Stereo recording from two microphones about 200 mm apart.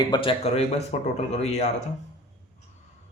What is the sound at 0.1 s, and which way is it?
Speech, 25° left (ahead or behind).